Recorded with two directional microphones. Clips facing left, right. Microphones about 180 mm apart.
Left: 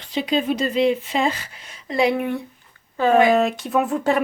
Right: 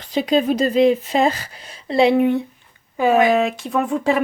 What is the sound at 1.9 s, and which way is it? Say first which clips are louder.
Speech: right 5 dB; 25° right (ahead or behind).